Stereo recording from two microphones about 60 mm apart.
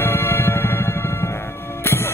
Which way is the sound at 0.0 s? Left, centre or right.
Left.